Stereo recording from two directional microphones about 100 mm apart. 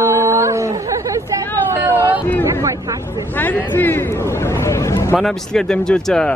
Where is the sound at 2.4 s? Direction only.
30° right (ahead or behind).